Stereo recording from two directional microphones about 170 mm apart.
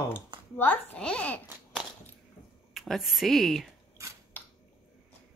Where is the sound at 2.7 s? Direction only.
Centre (ahead or behind).